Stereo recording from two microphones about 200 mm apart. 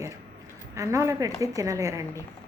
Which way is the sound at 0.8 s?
15° right (ahead or behind).